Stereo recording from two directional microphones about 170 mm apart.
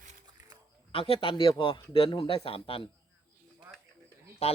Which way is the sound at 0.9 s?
35° left (ahead or behind).